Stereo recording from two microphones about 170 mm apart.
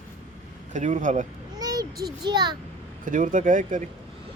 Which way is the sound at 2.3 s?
25° right (ahead or behind).